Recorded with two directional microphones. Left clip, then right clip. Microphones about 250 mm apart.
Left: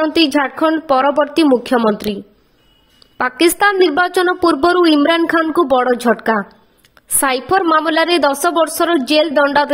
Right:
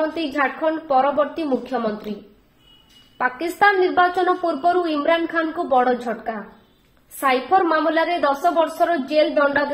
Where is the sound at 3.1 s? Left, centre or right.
Left.